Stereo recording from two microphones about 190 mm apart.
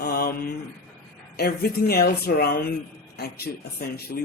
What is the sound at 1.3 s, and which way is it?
Speech, 55° left (ahead or behind).